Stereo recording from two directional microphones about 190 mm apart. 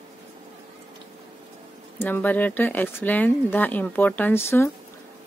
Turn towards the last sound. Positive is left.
turn(degrees=15)  # may be behind; listen again after turning